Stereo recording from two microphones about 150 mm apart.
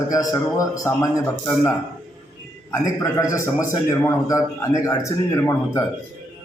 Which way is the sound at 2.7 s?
20° left (ahead or behind).